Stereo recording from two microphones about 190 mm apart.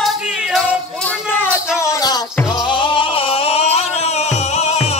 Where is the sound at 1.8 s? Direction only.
20° left (ahead or behind).